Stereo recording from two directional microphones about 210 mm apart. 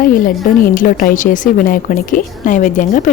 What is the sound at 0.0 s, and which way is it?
A woman's voice, 40° left (ahead or behind).